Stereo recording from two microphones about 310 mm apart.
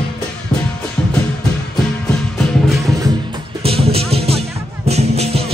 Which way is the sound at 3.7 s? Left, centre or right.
Centre.